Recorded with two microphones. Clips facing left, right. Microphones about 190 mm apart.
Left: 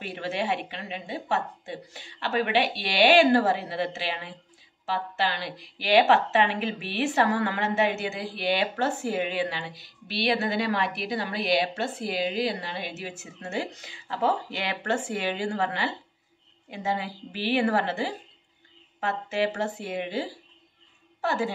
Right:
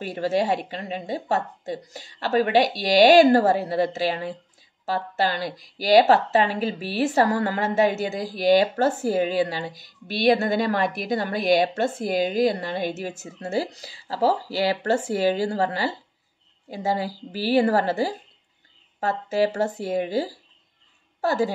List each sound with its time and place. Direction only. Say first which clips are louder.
0.0 s a woman's voice: right 7 dB; 40° right (ahead or behind)